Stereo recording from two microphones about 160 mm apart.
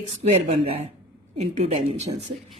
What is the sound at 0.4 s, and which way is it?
A woman's voice, 40° right (ahead or behind).